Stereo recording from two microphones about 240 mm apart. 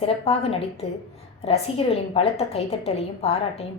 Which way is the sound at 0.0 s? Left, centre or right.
Left.